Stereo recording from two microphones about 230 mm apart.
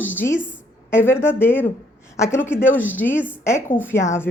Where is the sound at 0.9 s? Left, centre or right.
Centre.